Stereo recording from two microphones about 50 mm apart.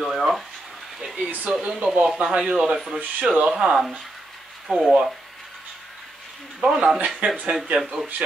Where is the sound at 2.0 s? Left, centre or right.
Centre.